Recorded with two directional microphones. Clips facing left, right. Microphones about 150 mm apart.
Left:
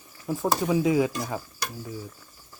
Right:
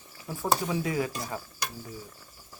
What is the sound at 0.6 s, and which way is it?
Speech, 15° left (ahead or behind).